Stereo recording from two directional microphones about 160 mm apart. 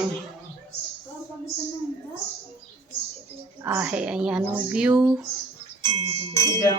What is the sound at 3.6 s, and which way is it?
Speech, 15° right (ahead or behind).